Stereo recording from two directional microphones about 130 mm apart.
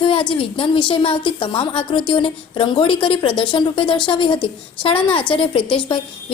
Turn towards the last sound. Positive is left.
turn(degrees=40)  # may be behind; listen again after turning